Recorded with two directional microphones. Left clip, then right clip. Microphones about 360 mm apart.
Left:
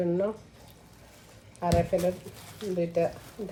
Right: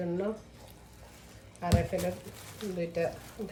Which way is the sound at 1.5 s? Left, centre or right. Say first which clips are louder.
Left 5 dB; centre.